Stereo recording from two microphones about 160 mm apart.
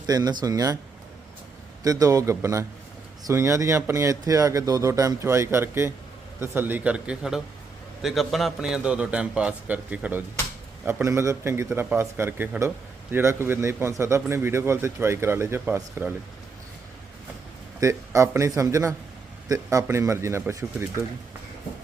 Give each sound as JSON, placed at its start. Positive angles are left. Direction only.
{"t": 0.0, "sound": "speech", "side_deg": -25}
{"t": 1.8, "sound": "a man's voice", "side_deg": -20}
{"t": 17.7, "sound": "a man's voice", "side_deg": -20}